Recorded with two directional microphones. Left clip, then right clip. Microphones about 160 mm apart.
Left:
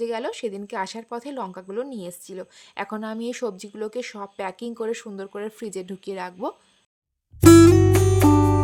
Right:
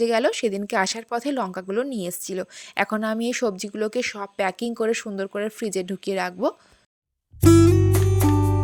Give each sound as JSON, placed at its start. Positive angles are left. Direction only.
{"t": 0.0, "sound": "speech", "side_deg": -25}
{"t": 7.4, "sound": "music", "side_deg": 0}